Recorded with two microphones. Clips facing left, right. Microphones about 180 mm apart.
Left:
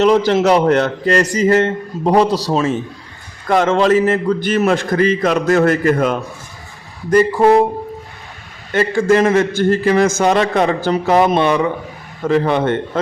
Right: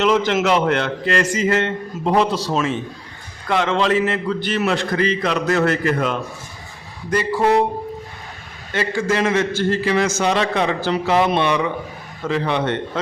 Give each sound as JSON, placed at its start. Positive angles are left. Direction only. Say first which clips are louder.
{"t": 0.0, "sound": "a man's voice", "louder": "left 5 dB", "side_deg": 35}
{"t": 8.7, "sound": "a man's voice", "louder": "left 7 dB", "side_deg": 50}